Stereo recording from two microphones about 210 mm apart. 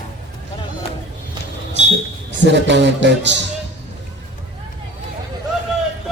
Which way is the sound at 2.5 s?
55° right (ahead or behind).